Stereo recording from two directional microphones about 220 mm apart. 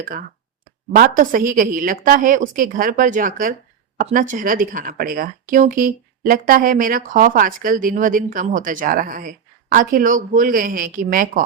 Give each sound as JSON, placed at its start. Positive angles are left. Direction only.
{"t": 0.0, "sound": "speech", "side_deg": -40}